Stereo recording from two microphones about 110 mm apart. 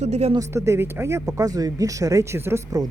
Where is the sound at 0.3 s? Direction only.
25° right (ahead or behind).